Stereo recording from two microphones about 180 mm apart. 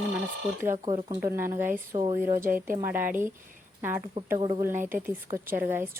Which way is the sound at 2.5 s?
50° right (ahead or behind).